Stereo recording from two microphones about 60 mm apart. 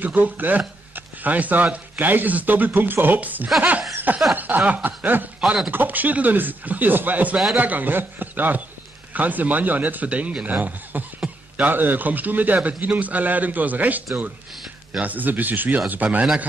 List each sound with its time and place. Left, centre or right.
0.0 s speech: right
4.1 s snicker: right
5.7 s speech: right